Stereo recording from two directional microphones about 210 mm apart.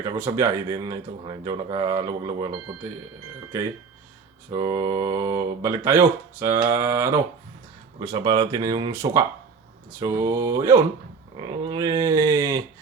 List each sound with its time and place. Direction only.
0.0 s speech: 15° right (ahead or behind)
4.5 s speech: 20° right (ahead or behind)
7.9 s speech: 25° right (ahead or behind)